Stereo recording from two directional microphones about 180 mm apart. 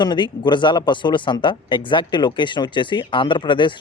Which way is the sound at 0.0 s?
25° left (ahead or behind).